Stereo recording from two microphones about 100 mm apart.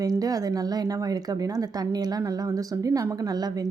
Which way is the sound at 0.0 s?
40° right (ahead or behind).